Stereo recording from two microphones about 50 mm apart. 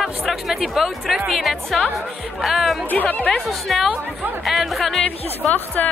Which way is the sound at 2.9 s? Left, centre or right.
Left.